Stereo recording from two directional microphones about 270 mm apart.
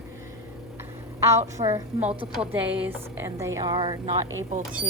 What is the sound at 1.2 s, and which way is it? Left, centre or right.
Speech, centre.